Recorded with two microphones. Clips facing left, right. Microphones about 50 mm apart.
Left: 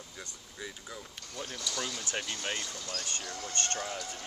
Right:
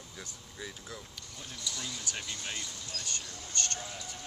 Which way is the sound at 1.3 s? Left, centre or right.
Left.